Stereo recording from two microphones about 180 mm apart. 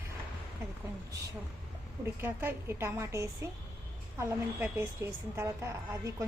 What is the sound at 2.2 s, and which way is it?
A woman's voice, 15° right (ahead or behind).